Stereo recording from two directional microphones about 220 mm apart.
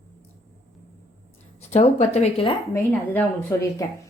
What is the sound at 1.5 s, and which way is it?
Speech, 30° left (ahead or behind).